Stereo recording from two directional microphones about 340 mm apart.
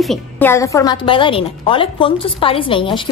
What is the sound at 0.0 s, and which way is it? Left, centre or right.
A woman's voice, centre.